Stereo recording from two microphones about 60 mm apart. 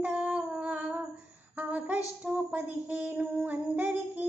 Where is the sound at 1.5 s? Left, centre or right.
Right.